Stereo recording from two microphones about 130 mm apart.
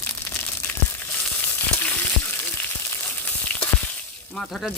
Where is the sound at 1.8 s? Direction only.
10° left (ahead or behind).